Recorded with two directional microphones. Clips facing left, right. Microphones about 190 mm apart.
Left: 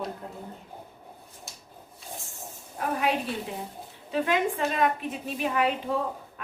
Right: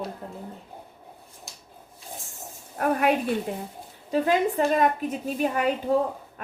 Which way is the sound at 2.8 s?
55° right (ahead or behind).